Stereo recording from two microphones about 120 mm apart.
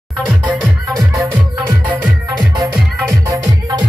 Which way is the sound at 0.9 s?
30° right (ahead or behind).